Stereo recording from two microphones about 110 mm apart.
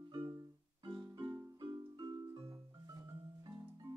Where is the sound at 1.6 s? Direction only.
40° right (ahead or behind).